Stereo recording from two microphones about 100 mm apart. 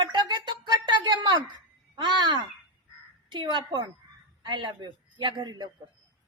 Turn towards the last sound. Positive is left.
turn(degrees=-50)  # may be behind; listen again after turning